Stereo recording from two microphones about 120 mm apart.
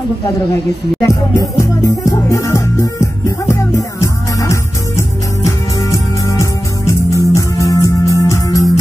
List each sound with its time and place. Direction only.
1.0 s music: 30° left (ahead or behind)